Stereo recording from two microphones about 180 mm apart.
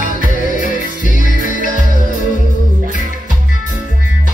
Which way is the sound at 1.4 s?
50° left (ahead or behind).